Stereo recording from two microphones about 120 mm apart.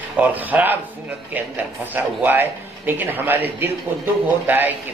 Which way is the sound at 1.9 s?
15° right (ahead or behind).